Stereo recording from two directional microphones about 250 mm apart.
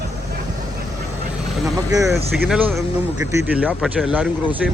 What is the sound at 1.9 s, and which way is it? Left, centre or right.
Speech, centre.